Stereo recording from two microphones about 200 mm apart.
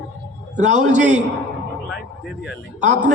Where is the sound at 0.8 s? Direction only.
35° right (ahead or behind).